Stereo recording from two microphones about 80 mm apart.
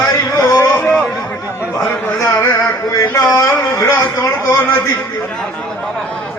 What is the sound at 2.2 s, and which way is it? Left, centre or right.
Carnatic music, left.